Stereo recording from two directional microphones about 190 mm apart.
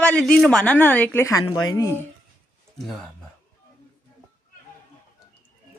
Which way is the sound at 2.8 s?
Centre (ahead or behind).